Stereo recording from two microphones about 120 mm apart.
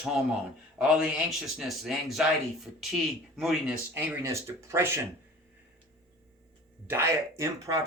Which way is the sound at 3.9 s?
15° right (ahead or behind).